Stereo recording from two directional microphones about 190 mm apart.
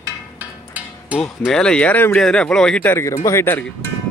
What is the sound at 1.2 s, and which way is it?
A man's voice, 5° left (ahead or behind).